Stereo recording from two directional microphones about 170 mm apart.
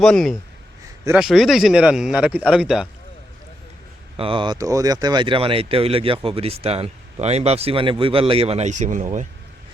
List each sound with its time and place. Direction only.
0.0 s speech: centre (ahead or behind)
4.2 s speech: 30° right (ahead or behind); by 9.2 s 45° right (ahead or behind)